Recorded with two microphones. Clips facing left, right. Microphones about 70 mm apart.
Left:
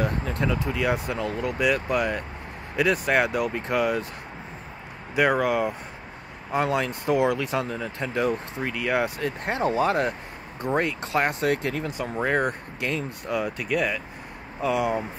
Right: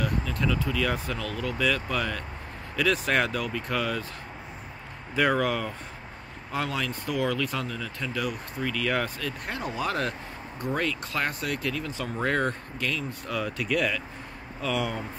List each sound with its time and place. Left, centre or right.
0.0 s speech: left
0.6 s speech: left
2.9 s speech: centre
3.3 s speech: left
5.1 s speech: centre
6.6 s speech: left
9.2 s speech: left
12.2 s speech: centre